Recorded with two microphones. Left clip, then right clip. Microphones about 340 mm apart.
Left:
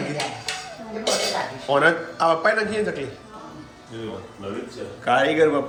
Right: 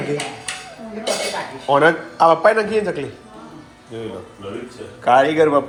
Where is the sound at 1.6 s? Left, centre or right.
Centre.